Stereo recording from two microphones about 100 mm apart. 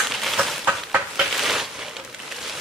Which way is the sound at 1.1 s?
Centre (ahead or behind).